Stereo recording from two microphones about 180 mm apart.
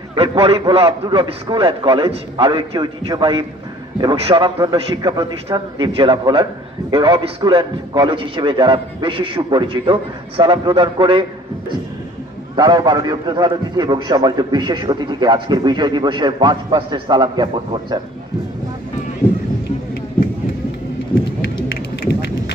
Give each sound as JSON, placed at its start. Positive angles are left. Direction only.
{"t": 0.1, "sound": "a man's voice", "side_deg": -30}
{"t": 12.5, "sound": "a man's voice", "side_deg": -25}